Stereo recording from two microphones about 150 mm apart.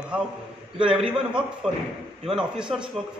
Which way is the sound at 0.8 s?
5° right (ahead or behind).